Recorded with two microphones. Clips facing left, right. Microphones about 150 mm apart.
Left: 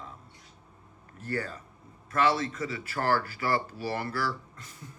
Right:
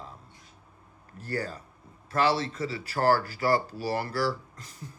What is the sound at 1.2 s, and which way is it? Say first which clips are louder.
Speech: right 1 dB; 35° right (ahead or behind).